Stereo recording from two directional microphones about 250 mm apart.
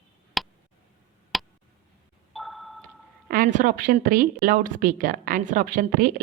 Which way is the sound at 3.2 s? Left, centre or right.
Right.